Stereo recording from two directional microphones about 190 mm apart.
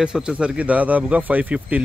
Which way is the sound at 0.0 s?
5° right (ahead or behind).